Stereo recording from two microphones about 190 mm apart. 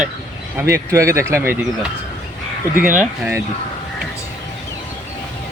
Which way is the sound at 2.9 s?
10° right (ahead or behind).